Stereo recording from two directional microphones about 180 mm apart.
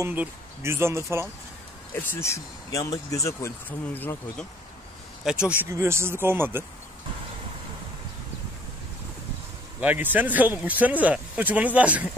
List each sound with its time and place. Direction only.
0.0 s speech: 10° right (ahead or behind)
2.0 s speech: 15° left (ahead or behind)
5.5 s speech: 15° right (ahead or behind)
9.8 s speech: 10° right (ahead or behind)